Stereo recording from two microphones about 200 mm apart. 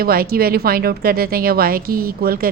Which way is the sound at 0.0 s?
50° right (ahead or behind).